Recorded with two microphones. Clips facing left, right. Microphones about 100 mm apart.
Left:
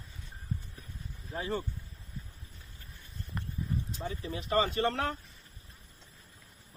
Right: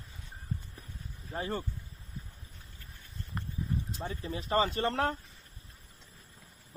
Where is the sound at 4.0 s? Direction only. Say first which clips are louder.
Even; 35° right (ahead or behind).